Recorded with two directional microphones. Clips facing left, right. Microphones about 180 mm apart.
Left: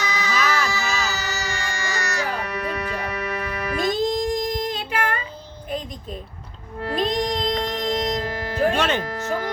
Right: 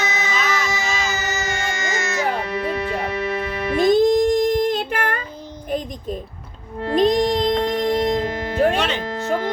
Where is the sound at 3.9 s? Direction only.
55° right (ahead or behind).